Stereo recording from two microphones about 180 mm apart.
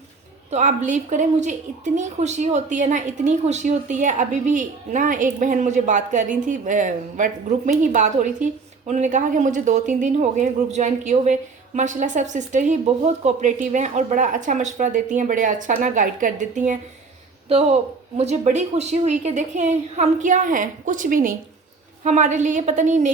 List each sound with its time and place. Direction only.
0.5 s a woman's voice: 40° right (ahead or behind)